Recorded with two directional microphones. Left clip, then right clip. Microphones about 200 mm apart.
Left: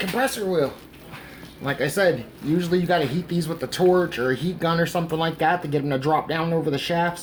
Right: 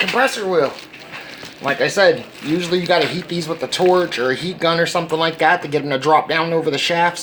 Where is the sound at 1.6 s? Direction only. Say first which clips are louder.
Right 7 dB; 25° left (ahead or behind).